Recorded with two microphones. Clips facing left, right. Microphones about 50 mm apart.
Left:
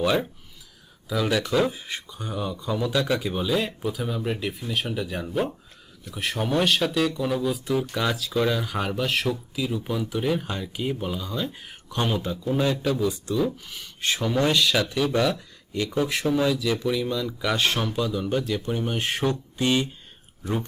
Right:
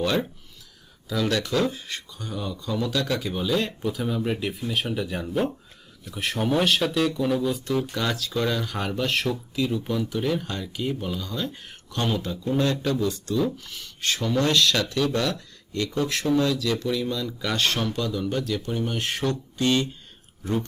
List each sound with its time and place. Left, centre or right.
0.0 s speech: centre